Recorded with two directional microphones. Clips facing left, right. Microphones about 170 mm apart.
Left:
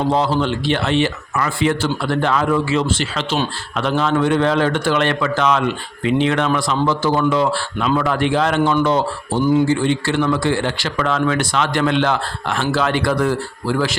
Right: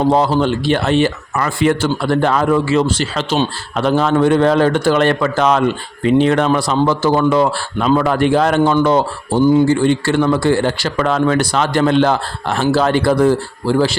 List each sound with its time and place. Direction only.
0.1 s a man's voice: 45° right (ahead or behind)
9.4 s speech: 30° right (ahead or behind)
9.6 s a man's voice: 45° right (ahead or behind); by 13.9 s 30° right (ahead or behind)